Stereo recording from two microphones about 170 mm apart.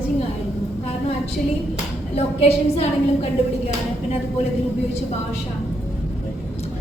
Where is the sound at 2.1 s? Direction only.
35° left (ahead or behind).